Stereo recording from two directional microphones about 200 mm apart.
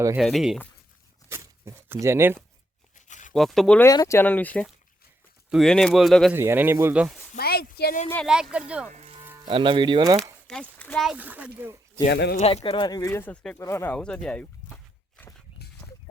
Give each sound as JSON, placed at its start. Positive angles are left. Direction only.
{"t": 0.2, "sound": "speech", "side_deg": 0}
{"t": 1.3, "sound": "speech", "side_deg": -15}
{"t": 2.9, "sound": "tearing", "side_deg": 40}
{"t": 3.3, "sound": "speech", "side_deg": 0}
{"t": 3.8, "sound": "speech", "side_deg": 15}
{"t": 6.3, "sound": "speech", "side_deg": -10}
{"t": 7.3, "sound": "a sound", "side_deg": 50}
{"t": 8.1, "sound": "speech", "side_deg": 0}
{"t": 8.9, "sound": "music", "side_deg": -30}
{"t": 9.5, "sound": "speech", "side_deg": -25}
{"t": 10.4, "sound": "speech", "side_deg": 5}
{"t": 12.0, "sound": "speech", "side_deg": 55}
{"t": 12.4, "sound": "speech", "side_deg": 30}